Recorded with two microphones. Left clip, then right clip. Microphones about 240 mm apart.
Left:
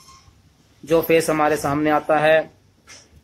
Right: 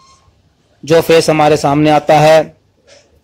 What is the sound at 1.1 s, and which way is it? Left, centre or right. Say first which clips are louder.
Speech: right 9 dB; right.